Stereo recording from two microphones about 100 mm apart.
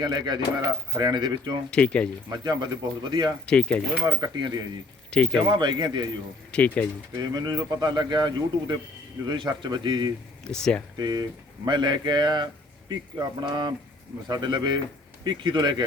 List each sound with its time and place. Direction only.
0.0 s a man's voice: 45° right (ahead or behind)
1.7 s speech: 10° left (ahead or behind)
2.3 s a man's voice: 45° right (ahead or behind)
3.4 s speech: 10° left (ahead or behind)
4.0 s a man's voice: 45° right (ahead or behind)
6.5 s speech: 10° left (ahead or behind)
7.2 s a man's voice: 45° right (ahead or behind)
10.5 s speech: 10° left (ahead or behind)
10.9 s a man's voice: 45° right (ahead or behind)